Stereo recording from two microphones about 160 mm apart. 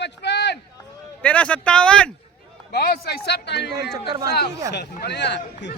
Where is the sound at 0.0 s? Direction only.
90° left.